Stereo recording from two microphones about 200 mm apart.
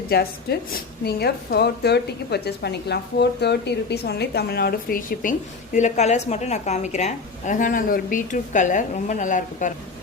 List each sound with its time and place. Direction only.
0.1 s a woman's voice: 50° left (ahead or behind)